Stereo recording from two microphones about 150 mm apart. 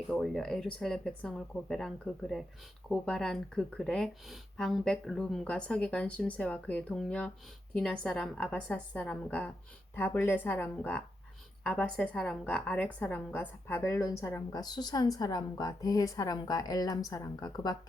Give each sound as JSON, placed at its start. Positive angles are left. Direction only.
{"t": 0.1, "sound": "a woman's voice", "side_deg": 5}